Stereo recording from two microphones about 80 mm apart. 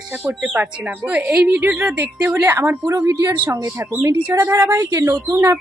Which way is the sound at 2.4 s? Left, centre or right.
Right.